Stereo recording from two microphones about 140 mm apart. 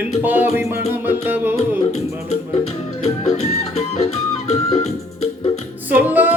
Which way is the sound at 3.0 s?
50° left (ahead or behind).